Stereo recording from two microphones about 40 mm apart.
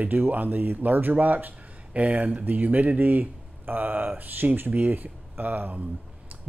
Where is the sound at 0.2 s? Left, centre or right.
Right.